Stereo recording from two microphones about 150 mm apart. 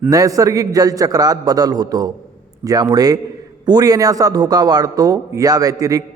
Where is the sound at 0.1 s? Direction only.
25° right (ahead or behind).